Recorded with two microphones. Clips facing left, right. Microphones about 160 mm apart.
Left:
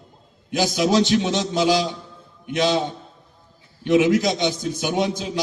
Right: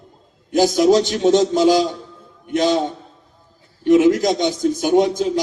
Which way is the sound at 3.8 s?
45° right (ahead or behind).